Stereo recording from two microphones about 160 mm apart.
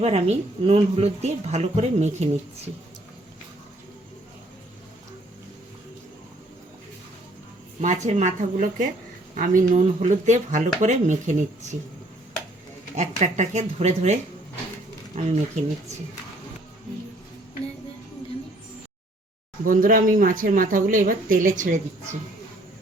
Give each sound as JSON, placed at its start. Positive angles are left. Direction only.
{"t": 0.0, "sound": "speech", "side_deg": -40}
{"t": 7.8, "sound": "speech", "side_deg": -45}
{"t": 13.0, "sound": "speech", "side_deg": -45}
{"t": 19.6, "sound": "speech", "side_deg": -60}